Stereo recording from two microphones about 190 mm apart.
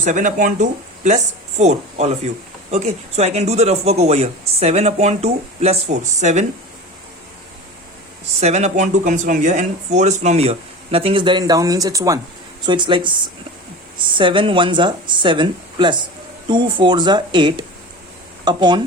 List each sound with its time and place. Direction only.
0.0 s speech: 40° right (ahead or behind)
8.4 s speech: 35° right (ahead or behind)
14.2 s speech: 25° right (ahead or behind)